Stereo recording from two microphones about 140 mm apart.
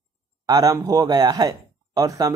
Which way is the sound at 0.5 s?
25° right (ahead or behind).